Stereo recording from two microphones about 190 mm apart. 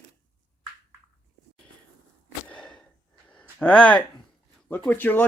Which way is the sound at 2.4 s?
5° left (ahead or behind).